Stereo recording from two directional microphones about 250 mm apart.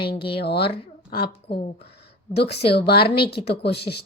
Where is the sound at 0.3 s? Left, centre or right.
Left.